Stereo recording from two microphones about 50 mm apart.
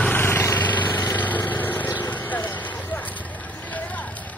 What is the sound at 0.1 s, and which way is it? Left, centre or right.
Vehicle, left.